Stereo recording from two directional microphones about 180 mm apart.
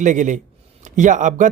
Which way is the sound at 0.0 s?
45° right (ahead or behind).